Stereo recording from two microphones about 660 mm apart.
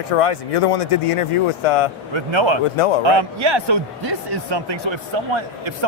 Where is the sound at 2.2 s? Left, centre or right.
Right.